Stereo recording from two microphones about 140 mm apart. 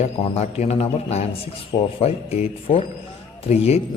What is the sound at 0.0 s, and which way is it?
Speech, 50° left (ahead or behind).